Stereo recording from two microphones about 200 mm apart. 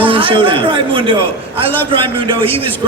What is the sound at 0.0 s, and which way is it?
A man's voice, 25° right (ahead or behind).